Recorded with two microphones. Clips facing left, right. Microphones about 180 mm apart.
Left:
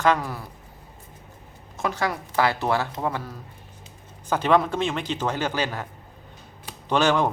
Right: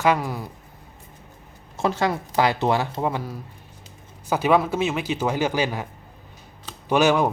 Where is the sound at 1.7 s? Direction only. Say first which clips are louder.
Right 4 dB; 25° right (ahead or behind); by 5.8 s 10° right (ahead or behind).